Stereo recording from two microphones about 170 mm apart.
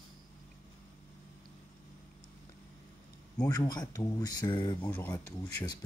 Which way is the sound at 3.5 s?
25° left (ahead or behind).